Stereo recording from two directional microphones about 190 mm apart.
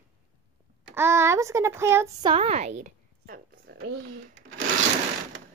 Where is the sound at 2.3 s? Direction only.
35° right (ahead or behind).